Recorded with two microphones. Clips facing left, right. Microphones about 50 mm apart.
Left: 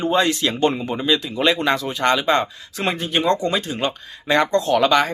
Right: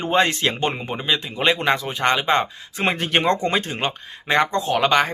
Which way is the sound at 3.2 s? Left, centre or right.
Right.